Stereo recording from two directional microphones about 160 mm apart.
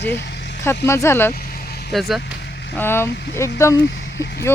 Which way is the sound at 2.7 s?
15° left (ahead or behind).